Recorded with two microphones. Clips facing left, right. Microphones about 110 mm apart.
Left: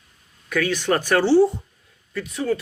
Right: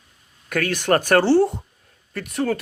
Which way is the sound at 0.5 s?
55° right (ahead or behind).